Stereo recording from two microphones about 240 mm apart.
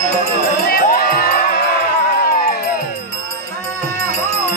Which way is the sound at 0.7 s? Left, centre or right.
Left.